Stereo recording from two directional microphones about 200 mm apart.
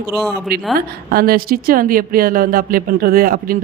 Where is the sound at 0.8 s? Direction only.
50° right (ahead or behind).